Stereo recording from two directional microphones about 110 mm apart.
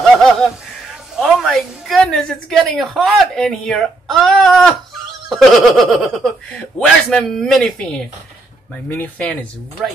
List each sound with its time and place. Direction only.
0.0 s a woman's voice: 5° left (ahead or behind)
8.8 s speech: 20° left (ahead or behind)
9.2 s a woman's voice: 5° left (ahead or behind)